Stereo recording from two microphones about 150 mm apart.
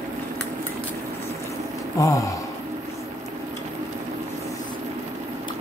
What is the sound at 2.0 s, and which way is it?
Speech, 20° left (ahead or behind).